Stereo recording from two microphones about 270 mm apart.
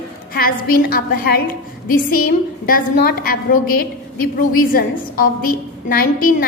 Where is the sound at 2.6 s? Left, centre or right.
Left.